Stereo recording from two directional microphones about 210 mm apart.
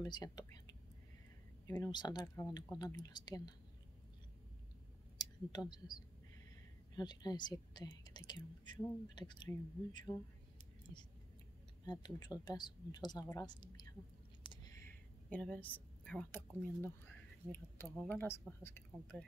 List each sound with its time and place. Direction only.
0.0 s speech: 20° left (ahead or behind)
1.7 s speech: 20° left (ahead or behind)
5.1 s speech: 20° left (ahead or behind)
14.4 s a sound: 20° left (ahead or behind)
14.9 s a sound: 5° left (ahead or behind)
17.5 s speech: 10° left (ahead or behind)